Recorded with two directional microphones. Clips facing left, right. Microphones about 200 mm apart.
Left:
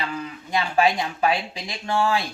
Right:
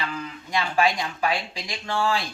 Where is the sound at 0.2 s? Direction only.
25° left (ahead or behind).